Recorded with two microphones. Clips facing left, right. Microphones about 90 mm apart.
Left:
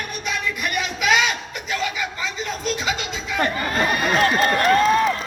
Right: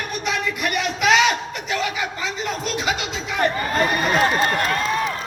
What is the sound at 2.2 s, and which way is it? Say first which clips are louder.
Speech: even; 65° right (ahead or behind).